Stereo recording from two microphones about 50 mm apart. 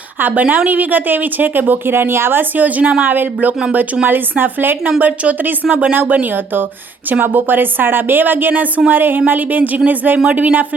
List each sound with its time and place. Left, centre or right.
0.2 s a woman's voice: right
4.9 s a woman's voice: right
5.6 s speech: right
5.9 s a woman's voice: right